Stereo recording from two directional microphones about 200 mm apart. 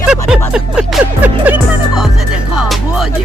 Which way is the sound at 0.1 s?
5° right (ahead or behind).